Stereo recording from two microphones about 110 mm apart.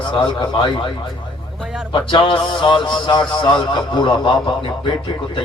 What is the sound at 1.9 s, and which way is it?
Speech, 45° left (ahead or behind).